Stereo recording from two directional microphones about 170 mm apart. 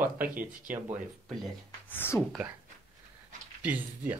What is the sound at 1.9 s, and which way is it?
Speech, 10° left (ahead or behind).